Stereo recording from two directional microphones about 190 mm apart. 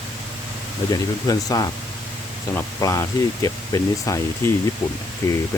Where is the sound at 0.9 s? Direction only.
20° left (ahead or behind).